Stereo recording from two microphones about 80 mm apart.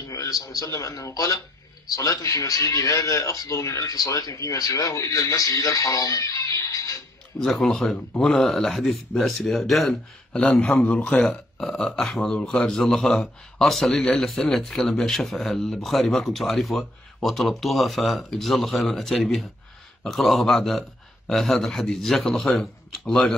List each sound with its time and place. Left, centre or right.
0.1 s speech: left
7.3 s speech: centre